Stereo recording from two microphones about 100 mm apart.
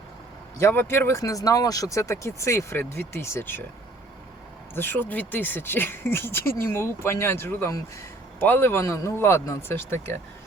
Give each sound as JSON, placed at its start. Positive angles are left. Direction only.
{"t": 0.6, "sound": "speech", "side_deg": 25}
{"t": 4.7, "sound": "speech", "side_deg": 20}